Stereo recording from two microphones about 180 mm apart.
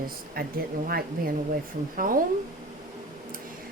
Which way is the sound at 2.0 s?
50° right (ahead or behind).